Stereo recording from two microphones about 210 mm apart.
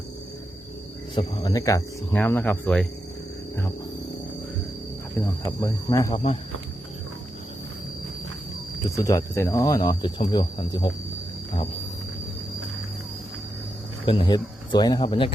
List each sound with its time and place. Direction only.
1.1 s speech: 20° left (ahead or behind)
5.5 s speech: 15° left (ahead or behind)
9.0 s speech: 15° left (ahead or behind)
14.0 s speech: 25° left (ahead or behind)